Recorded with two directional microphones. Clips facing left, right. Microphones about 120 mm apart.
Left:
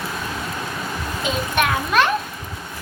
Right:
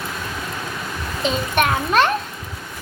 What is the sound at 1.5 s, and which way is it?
Speech, 20° right (ahead or behind).